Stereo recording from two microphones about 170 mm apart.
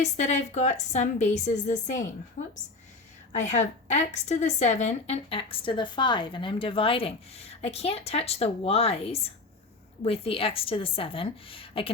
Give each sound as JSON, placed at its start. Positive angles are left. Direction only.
{"t": 0.0, "sound": "a woman's voice", "side_deg": 45}